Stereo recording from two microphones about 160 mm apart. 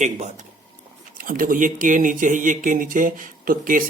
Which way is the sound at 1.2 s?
60° right (ahead or behind).